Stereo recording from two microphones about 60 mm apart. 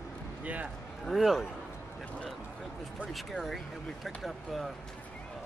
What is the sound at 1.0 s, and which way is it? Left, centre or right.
Speech, centre.